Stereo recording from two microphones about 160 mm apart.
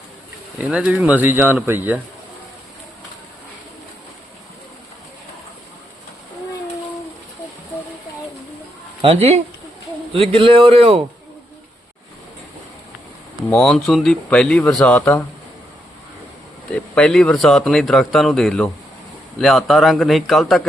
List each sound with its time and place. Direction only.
0.6 s speech: 5° right (ahead or behind)
9.0 s speech: 40° right (ahead or behind)
13.5 s speech: 5° left (ahead or behind)
16.7 s speech: 5° left (ahead or behind)